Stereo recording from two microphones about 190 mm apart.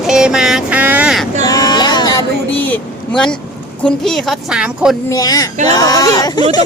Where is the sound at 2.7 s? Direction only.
5° left (ahead or behind).